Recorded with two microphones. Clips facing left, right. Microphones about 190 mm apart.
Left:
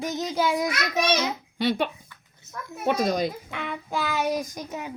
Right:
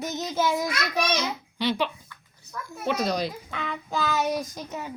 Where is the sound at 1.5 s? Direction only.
50° left (ahead or behind).